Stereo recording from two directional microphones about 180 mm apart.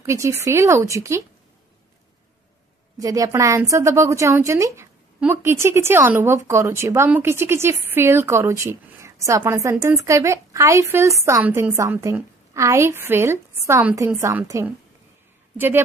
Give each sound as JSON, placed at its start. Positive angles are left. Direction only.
{"t": 0.0, "sound": "speech", "side_deg": -15}
{"t": 3.0, "sound": "speech", "side_deg": -20}